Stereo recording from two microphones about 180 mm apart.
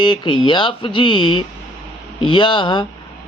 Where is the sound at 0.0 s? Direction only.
25° left (ahead or behind).